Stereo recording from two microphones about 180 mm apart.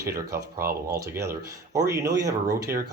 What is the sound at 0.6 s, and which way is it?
Speech, 65° right (ahead or behind).